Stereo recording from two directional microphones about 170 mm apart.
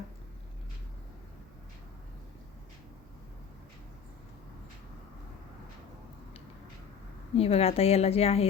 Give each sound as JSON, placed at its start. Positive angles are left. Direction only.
{"t": 7.3, "sound": "a woman's voice", "side_deg": 35}